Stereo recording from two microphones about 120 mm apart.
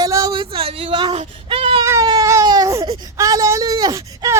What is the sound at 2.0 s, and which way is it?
Baby cry, 35° right (ahead or behind).